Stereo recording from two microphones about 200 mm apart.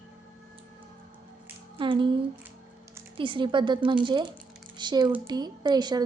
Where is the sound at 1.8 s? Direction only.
25° right (ahead or behind).